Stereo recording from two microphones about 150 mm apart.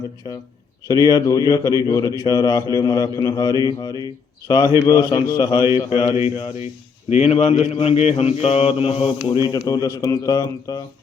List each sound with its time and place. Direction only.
0.2 s speech: 30° left (ahead or behind)
5.9 s mantra: 35° left (ahead or behind)
7.1 s a man's voice: 45° left (ahead or behind)
8.1 s mantra: 45° left (ahead or behind)
9.5 s speech: 25° left (ahead or behind)